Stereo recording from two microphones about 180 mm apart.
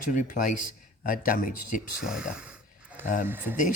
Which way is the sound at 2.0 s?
5° right (ahead or behind).